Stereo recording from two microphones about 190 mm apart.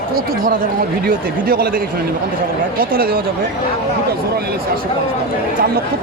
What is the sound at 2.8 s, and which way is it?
Speech, 50° right (ahead or behind).